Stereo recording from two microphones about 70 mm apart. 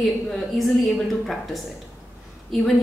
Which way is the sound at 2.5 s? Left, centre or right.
Centre.